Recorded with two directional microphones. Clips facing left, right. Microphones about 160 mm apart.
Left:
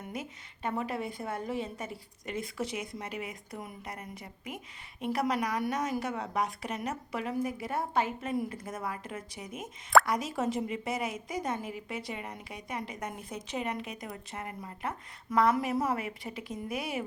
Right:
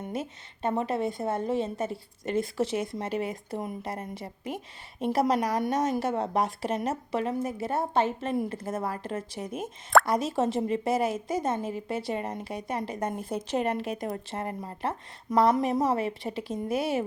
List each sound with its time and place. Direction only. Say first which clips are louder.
0.0 s a woman's voice: right 6 dB; 25° right (ahead or behind)